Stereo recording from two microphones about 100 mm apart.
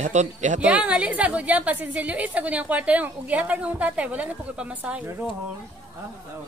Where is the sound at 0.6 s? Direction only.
15° right (ahead or behind).